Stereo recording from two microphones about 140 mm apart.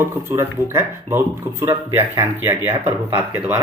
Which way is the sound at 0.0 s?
15° right (ahead or behind).